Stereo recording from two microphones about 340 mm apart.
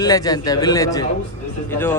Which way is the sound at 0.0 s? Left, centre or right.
Centre.